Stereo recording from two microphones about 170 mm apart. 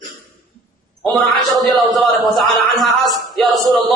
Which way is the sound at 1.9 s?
Centre (ahead or behind).